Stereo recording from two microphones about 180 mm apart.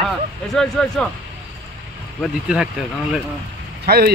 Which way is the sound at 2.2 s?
5° right (ahead or behind).